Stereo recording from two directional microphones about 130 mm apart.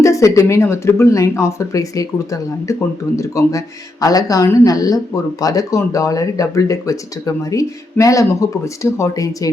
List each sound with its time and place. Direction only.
0.0 s speech: 25° left (ahead or behind)